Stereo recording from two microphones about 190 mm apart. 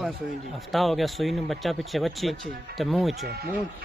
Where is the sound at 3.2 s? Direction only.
55° right (ahead or behind).